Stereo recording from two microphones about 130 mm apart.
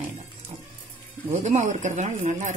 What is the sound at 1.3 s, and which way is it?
Speech, 60° right (ahead or behind).